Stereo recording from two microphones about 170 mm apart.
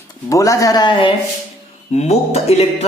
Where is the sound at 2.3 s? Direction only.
40° left (ahead or behind).